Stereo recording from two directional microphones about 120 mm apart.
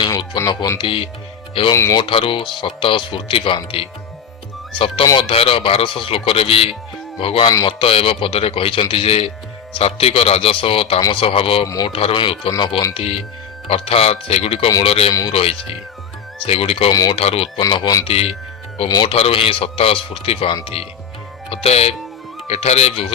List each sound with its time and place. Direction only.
0.3 s speech: 30° left (ahead or behind)
0.8 s speech: 45° left (ahead or behind)
1.7 s speech: 25° left (ahead or behind)
2.0 s speech: 45° left (ahead or behind)
5.1 s a man's voice: 50° left (ahead or behind)
16.9 s speech: 30° left (ahead or behind)
17.2 s a man's voice: 55° left (ahead or behind)
17.6 s speech: 35° left (ahead or behind)
18.0 s a man's voice: 55° left (ahead or behind)